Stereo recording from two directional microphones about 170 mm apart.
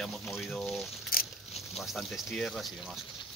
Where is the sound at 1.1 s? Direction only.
60° left (ahead or behind).